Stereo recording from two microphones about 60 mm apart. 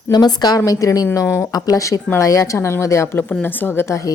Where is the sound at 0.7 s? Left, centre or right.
Left.